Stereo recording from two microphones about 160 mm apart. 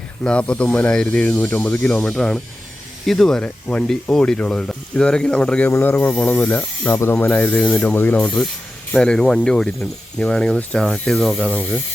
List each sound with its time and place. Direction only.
0.3 s speech: 5° left (ahead or behind)